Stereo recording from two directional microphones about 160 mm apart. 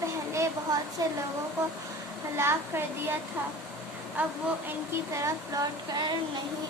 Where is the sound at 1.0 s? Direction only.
20° right (ahead or behind).